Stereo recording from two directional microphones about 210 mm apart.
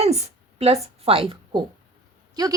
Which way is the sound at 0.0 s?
30° right (ahead or behind).